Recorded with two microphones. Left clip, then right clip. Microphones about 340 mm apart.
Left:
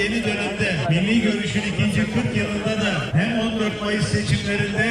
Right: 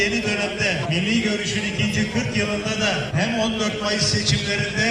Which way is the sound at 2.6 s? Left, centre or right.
Centre.